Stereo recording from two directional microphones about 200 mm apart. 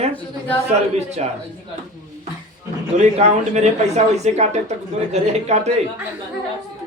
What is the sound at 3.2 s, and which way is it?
Speech, 35° right (ahead or behind).